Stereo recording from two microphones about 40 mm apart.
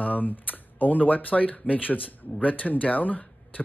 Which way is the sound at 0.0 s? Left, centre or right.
Left.